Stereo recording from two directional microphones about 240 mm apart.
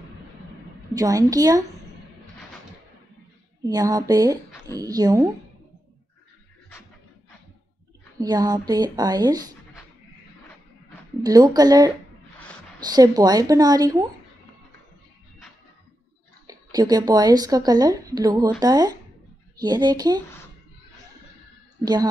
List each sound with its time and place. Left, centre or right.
0.9 s speech: centre
3.6 s speech: centre
8.2 s speech: centre
11.2 s speech: centre
16.4 s speech: centre